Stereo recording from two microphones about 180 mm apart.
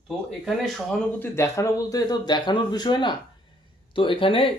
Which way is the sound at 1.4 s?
15° left (ahead or behind).